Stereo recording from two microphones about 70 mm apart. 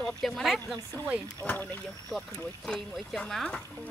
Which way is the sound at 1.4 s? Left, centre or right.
Left.